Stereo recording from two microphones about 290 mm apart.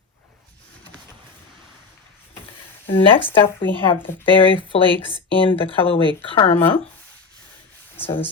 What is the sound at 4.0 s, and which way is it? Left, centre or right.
Speech, centre.